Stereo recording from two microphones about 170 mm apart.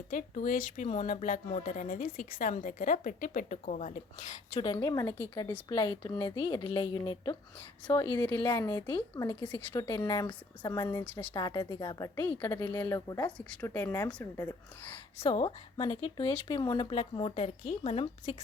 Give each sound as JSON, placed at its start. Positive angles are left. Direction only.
{"t": 0.1, "sound": "speech", "side_deg": 50}
{"t": 4.6, "sound": "a woman's voice", "side_deg": 20}
{"t": 8.4, "sound": "a woman's voice", "side_deg": 20}
{"t": 11.3, "sound": "a woman's voice", "side_deg": 25}
{"t": 15.2, "sound": "speech", "side_deg": 30}